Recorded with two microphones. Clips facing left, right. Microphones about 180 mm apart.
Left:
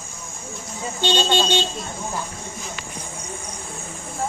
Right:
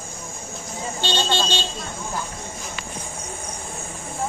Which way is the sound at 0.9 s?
15° left (ahead or behind).